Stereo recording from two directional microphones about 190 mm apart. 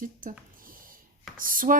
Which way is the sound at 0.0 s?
45° right (ahead or behind).